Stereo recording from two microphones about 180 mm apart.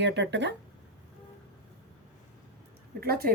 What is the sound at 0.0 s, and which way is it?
Speech, 75° right (ahead or behind).